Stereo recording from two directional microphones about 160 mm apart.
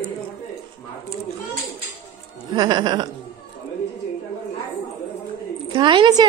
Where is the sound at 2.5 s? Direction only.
25° right (ahead or behind).